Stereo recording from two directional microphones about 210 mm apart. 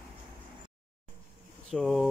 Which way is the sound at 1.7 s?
Centre (ahead or behind).